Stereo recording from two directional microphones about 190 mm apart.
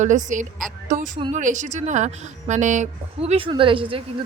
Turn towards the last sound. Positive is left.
turn(degrees=-25)  # may be behind; listen again after turning